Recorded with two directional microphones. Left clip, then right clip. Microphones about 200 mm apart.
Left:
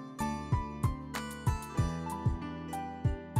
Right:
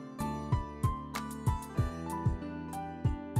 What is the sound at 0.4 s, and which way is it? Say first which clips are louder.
Music: left 1 dB; 35° right (ahead or behind).